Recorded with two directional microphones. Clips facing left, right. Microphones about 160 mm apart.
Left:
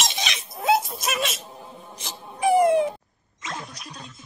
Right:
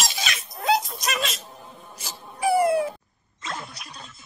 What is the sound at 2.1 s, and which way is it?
Wail, 15° left (ahead or behind).